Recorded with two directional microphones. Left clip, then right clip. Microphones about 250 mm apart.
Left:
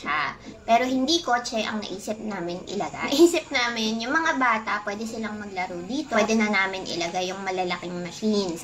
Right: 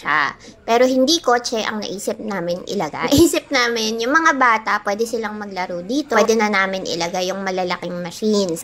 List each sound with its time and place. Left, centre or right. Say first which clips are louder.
0.0 s a woman's voice: right 8 dB; right